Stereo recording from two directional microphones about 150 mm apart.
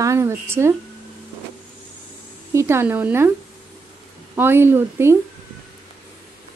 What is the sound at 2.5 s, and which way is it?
Speech, 20° right (ahead or behind).